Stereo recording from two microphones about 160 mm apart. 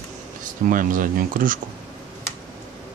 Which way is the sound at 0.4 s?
55° right (ahead or behind).